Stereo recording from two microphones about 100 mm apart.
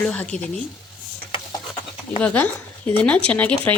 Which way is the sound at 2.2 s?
15° left (ahead or behind).